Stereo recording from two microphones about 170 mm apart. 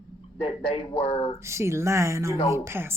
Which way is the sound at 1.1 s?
35° left (ahead or behind).